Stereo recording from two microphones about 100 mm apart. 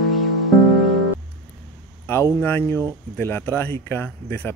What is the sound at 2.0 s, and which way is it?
Speech, 25° left (ahead or behind).